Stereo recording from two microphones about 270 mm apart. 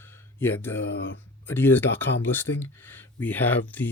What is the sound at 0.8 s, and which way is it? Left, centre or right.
Speech, left.